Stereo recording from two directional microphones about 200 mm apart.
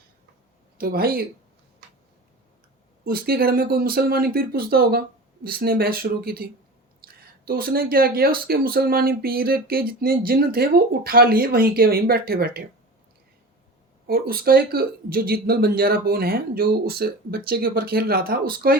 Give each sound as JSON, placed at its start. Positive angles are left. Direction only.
{"t": 0.8, "sound": "speech", "side_deg": -50}
{"t": 3.0, "sound": "speech", "side_deg": -50}
{"t": 14.1, "sound": "speech", "side_deg": -50}